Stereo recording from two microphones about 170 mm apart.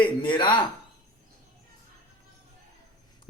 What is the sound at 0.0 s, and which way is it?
Speech, 30° left (ahead or behind).